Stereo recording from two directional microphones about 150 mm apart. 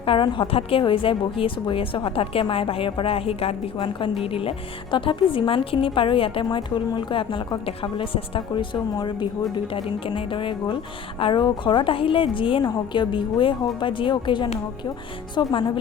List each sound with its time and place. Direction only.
0.0 s a woman's voice: 35° left (ahead or behind)